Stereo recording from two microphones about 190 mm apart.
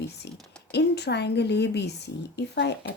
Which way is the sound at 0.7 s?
60° left (ahead or behind).